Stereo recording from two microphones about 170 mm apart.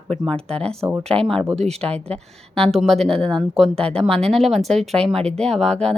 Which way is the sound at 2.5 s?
Centre (ahead or behind).